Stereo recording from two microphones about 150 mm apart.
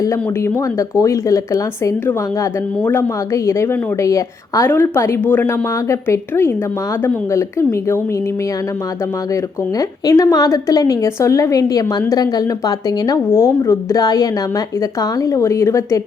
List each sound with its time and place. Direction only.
0.0 s speech: 20° left (ahead or behind)
9.3 s a woman's voice: 20° left (ahead or behind)